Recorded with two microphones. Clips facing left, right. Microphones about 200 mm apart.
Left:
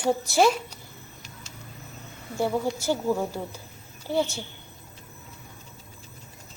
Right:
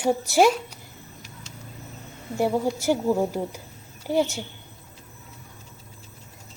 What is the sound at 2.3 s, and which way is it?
A woman's voice, 20° right (ahead or behind).